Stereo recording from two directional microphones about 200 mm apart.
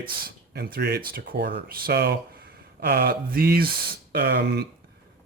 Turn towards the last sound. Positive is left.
turn(degrees=-55)  # may be behind; listen again after turning